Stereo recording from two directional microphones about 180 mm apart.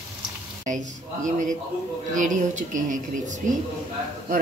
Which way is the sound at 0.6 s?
45° right (ahead or behind).